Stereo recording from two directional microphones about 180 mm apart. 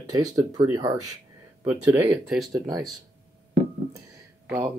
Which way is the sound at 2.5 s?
20° right (ahead or behind).